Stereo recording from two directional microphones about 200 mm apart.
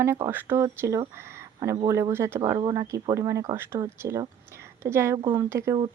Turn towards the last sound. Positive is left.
turn(degrees=-15)  # may be behind; listen again after turning